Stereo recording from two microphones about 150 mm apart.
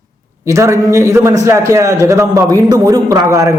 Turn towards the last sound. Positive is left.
turn(degrees=-20)  # may be behind; listen again after turning